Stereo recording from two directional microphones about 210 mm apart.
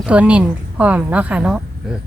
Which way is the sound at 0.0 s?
5° right (ahead or behind).